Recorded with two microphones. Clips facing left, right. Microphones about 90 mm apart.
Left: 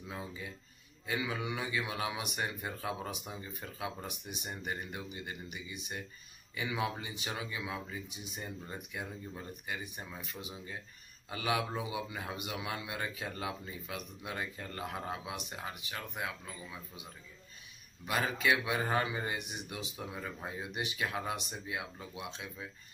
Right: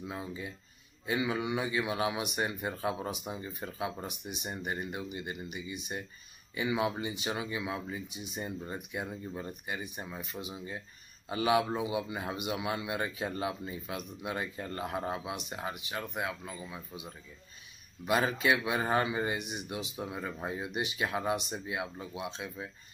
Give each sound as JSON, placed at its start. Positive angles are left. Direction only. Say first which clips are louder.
{"t": 1.0, "sound": "speech", "louder": "right 4 dB", "side_deg": -25}
{"t": 18.0, "sound": "speech", "louder": "right 3 dB", "side_deg": -20}
{"t": 19.3, "sound": "speech", "louder": "right 4 dB", "side_deg": -20}